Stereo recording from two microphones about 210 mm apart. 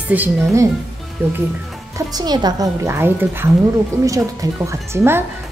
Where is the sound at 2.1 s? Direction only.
20° right (ahead or behind).